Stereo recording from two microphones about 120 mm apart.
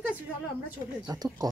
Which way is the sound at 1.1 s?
35° right (ahead or behind).